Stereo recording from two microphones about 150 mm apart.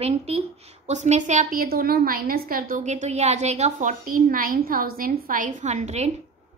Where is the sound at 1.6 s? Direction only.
85° right; by 6.1 s 50° right (ahead or behind).